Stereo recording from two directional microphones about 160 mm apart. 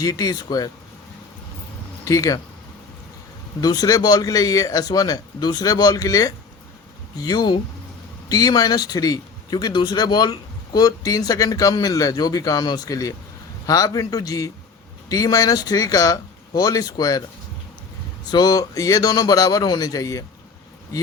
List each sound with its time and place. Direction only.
0.0 s speech: 25° left (ahead or behind)
2.0 s speech: 20° left (ahead or behind)
3.6 s speech: 25° left (ahead or behind)
18.3 s speech: 25° left (ahead or behind)